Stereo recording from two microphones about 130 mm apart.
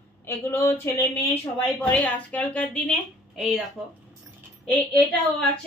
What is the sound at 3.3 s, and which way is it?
Speech, 5° right (ahead or behind).